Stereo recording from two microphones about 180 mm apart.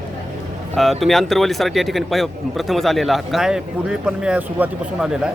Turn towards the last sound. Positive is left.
turn(degrees=-5)  # may be behind; listen again after turning